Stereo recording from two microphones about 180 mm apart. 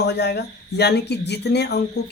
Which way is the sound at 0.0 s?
70° left (ahead or behind).